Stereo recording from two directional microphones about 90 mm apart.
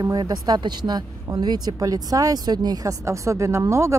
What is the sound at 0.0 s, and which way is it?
Speech, 45° right (ahead or behind).